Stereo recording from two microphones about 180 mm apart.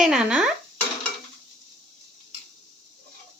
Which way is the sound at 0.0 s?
5° right (ahead or behind).